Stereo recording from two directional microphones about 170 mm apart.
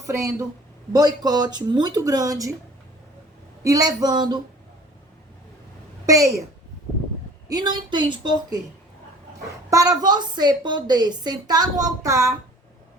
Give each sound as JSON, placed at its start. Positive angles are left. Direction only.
{"t": 0.9, "sound": "a woman's voice", "side_deg": -25}
{"t": 3.6, "sound": "a woman's voice", "side_deg": -20}
{"t": 6.1, "sound": "a woman's voice", "side_deg": -20}
{"t": 7.4, "sound": "a woman's voice", "side_deg": -25}
{"t": 9.6, "sound": "a woman's voice", "side_deg": -20}